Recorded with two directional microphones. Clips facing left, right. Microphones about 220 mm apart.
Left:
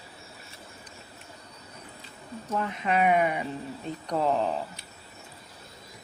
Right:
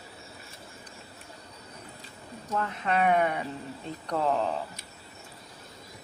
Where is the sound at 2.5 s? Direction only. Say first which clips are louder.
Left 1 dB; 5° left (ahead or behind).